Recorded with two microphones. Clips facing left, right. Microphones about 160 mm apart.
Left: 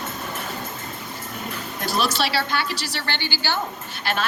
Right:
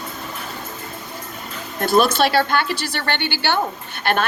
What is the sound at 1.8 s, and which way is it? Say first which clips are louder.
A woman's voice: right 8 dB; 50° right (ahead or behind).